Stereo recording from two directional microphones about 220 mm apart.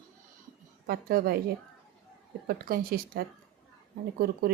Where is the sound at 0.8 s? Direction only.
45° right (ahead or behind).